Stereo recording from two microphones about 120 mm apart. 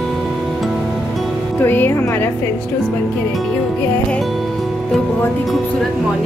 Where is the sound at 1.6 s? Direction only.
15° left (ahead or behind).